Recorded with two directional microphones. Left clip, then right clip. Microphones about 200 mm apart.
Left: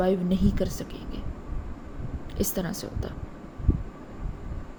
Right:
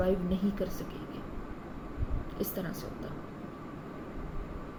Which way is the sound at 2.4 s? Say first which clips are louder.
Left 7 dB; 55° left (ahead or behind).